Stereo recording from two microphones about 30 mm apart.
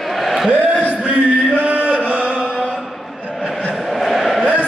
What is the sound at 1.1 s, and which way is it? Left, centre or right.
Chant, right.